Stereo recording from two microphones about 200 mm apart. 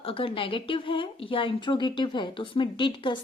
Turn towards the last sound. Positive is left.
turn(degrees=25)  # may be behind; listen again after turning